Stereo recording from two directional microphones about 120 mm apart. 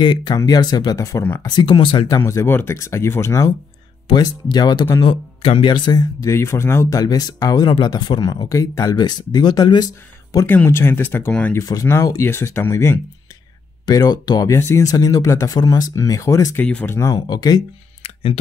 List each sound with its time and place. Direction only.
0.0 s speech: 40° left (ahead or behind)
2.0 s speech: 25° left (ahead or behind)
4.1 s speech: 35° left (ahead or behind)
5.0 s speech: 45° left (ahead or behind)
6.3 s speech: 20° left (ahead or behind)
10.4 s speech: 15° left (ahead or behind)
11.5 s speech: 30° left (ahead or behind)
13.8 s speech: 35° left (ahead or behind)
16.5 s speech: 15° left (ahead or behind); by 17.6 s 35° left (ahead or behind)
18.0 s a sound: 50° left (ahead or behind)